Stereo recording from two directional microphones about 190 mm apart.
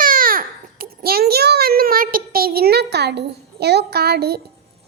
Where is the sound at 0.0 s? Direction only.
50° right (ahead or behind).